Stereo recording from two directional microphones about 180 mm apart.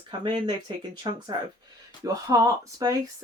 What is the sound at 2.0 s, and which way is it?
Speech, 20° right (ahead or behind).